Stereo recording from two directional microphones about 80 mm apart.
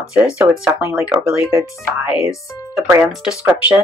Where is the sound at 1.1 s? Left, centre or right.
Centre.